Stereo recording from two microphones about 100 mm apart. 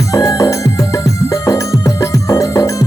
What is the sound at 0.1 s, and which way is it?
Music, 35° left (ahead or behind).